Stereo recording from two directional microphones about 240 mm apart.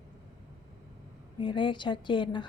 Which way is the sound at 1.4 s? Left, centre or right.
Centre.